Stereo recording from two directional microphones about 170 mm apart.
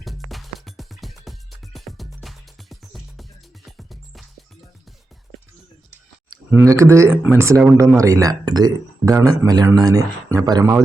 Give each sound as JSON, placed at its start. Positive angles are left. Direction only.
{"t": 0.0, "sound": "music", "side_deg": 0}
{"t": 6.5, "sound": "speech", "side_deg": -15}